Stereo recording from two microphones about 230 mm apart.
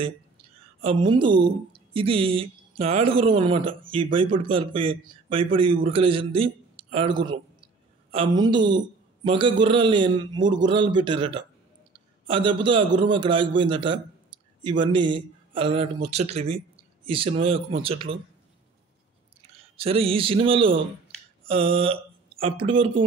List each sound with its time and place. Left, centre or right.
0.8 s speech: right
19.8 s speech: right